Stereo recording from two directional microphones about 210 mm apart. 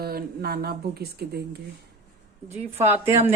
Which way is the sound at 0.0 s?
50° right (ahead or behind).